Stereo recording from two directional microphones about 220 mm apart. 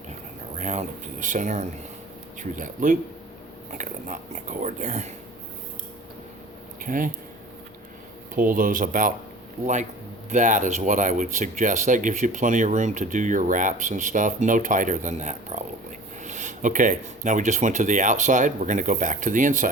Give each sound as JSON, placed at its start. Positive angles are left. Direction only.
{"t": 0.6, "sound": "speech", "side_deg": -35}
{"t": 6.8, "sound": "speech", "side_deg": -40}
{"t": 8.4, "sound": "speech", "side_deg": -40}
{"t": 10.2, "sound": "speech", "side_deg": -35}